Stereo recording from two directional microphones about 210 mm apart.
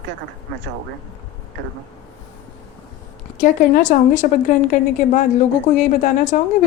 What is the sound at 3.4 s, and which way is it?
Speech, 35° left (ahead or behind).